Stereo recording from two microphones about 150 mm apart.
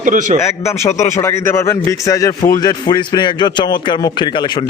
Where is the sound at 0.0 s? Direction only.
60° right (ahead or behind).